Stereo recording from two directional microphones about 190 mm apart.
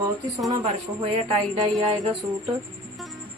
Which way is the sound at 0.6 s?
30° right (ahead or behind).